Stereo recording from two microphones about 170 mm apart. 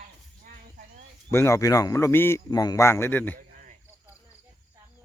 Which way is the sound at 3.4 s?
50° right (ahead or behind).